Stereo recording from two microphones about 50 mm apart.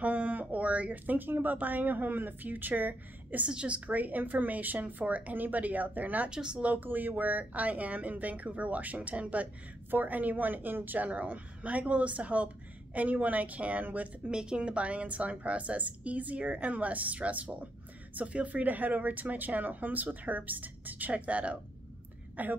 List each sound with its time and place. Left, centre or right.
0.0 s speech: right
3.4 s speech: right
6.3 s speech: centre
6.6 s speech: right
14.3 s a woman's voice: centre; by 22.5 s right